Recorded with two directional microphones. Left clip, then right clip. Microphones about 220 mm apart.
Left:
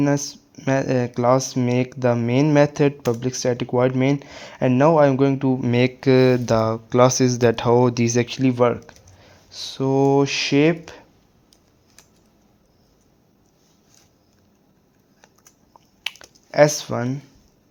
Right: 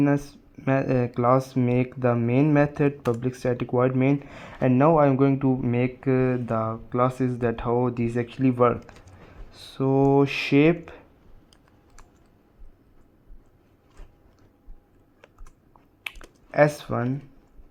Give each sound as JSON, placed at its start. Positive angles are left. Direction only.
{"t": 0.0, "sound": "speech", "side_deg": 10}
{"t": 5.7, "sound": "speech", "side_deg": 30}
{"t": 8.4, "sound": "speech", "side_deg": 15}
{"t": 16.0, "sound": "a sound", "side_deg": 10}